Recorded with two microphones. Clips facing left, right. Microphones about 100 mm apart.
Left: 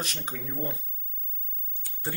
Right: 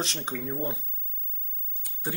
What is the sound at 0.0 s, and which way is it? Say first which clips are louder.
Speech: right 4 dB; 25° right (ahead or behind).